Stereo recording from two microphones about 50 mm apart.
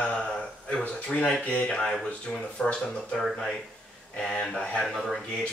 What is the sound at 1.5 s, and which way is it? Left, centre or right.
Speech, left.